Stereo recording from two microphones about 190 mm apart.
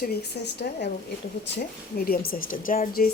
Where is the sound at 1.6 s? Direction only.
50° left (ahead or behind).